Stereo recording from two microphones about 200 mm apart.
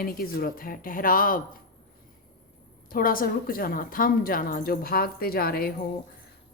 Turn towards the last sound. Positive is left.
turn(degrees=50)  # may be behind; listen again after turning